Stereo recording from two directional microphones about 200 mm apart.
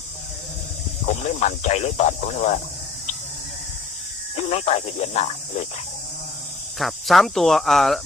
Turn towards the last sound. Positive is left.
turn(degrees=0)  # may be behind; listen again after turning